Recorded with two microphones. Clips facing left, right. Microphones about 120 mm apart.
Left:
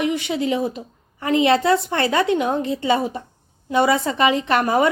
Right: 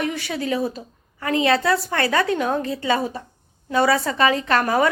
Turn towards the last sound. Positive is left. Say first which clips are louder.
# left 1 dB
turn(degrees=20)  # may be behind; listen again after turning